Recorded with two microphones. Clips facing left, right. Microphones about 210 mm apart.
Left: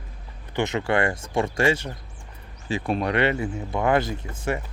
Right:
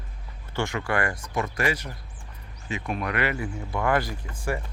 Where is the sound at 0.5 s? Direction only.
20° left (ahead or behind).